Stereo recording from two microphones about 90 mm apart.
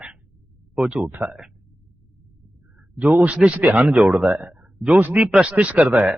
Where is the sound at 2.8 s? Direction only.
15° right (ahead or behind).